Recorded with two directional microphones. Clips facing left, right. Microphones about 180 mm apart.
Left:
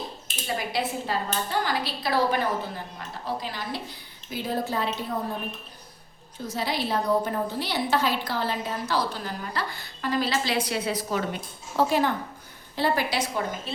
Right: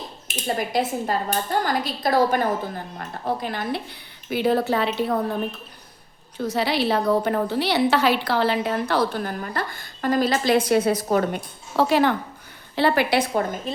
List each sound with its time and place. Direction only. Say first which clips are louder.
0.4 s a woman's voice: right 5 dB; 45° right (ahead or behind); by 5.2 s 70° right (ahead or behind)
6.3 s a woman's voice: right 6 dB; 70° right (ahead or behind); by 13.7 s 55° right (ahead or behind)